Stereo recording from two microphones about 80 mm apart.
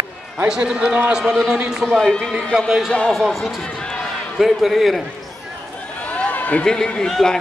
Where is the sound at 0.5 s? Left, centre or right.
Centre.